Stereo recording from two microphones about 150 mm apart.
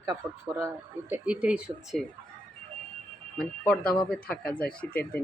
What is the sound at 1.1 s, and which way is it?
Speech, 10° right (ahead or behind).